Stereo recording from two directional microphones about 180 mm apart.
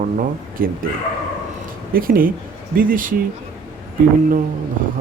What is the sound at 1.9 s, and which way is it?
Speech, 50° right (ahead or behind).